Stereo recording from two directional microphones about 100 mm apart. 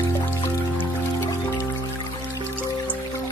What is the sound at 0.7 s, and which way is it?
Music, 25° left (ahead or behind).